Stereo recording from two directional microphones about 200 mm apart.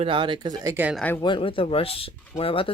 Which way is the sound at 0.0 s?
25° right (ahead or behind).